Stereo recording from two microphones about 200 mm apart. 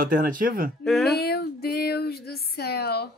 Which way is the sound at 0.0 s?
45° right (ahead or behind).